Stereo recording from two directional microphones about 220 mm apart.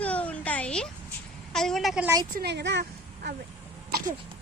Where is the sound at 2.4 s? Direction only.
50° right (ahead or behind).